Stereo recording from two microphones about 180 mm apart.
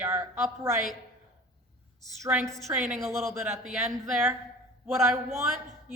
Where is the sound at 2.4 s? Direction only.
Centre (ahead or behind).